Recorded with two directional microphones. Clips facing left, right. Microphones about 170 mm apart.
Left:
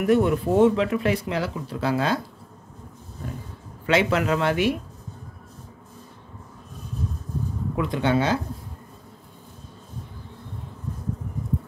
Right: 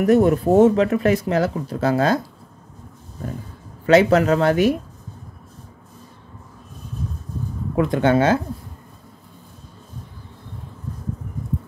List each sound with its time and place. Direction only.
0.0 s speech: 45° right (ahead or behind)
3.8 s speech: 40° right (ahead or behind)
7.7 s speech: 50° right (ahead or behind)